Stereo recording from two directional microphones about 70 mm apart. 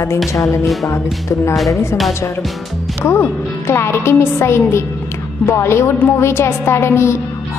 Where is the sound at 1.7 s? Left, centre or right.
Left.